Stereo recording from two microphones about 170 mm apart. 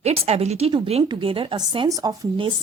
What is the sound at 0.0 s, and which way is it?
A woman's voice, 35° right (ahead or behind).